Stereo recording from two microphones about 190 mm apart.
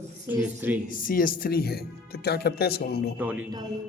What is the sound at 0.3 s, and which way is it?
Speech, 10° right (ahead or behind).